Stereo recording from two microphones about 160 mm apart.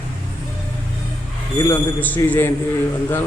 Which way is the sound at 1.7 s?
10° left (ahead or behind).